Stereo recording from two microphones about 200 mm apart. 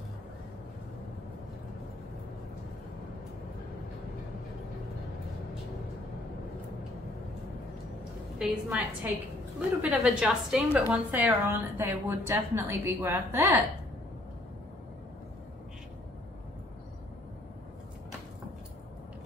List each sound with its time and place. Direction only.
8.4 s a woman's voice: 10° right (ahead or behind)